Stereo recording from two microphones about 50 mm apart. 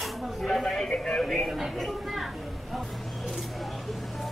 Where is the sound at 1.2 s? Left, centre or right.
Centre.